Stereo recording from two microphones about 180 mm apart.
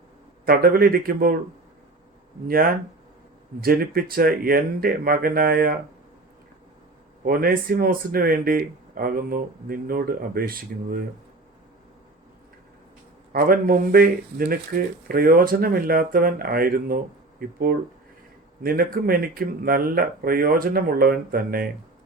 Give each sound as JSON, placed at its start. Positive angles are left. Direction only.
{"t": 0.4, "sound": "speech", "side_deg": -55}
{"t": 2.5, "sound": "speech", "side_deg": -55}
{"t": 7.3, "sound": "speech", "side_deg": -55}
{"t": 13.3, "sound": "speech", "side_deg": -55}